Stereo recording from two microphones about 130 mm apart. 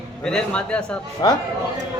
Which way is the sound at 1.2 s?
35° left (ahead or behind).